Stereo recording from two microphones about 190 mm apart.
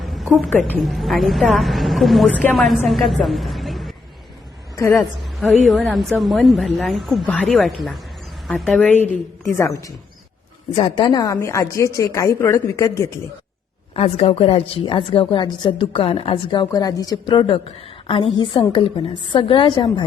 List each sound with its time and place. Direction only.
0.0 s a woman's voice: centre (ahead or behind)
4.9 s a woman's voice: centre (ahead or behind)
13.9 s a woman's voice: 30° left (ahead or behind)